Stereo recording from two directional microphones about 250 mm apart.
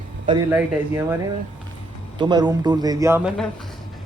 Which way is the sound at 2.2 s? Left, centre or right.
Centre.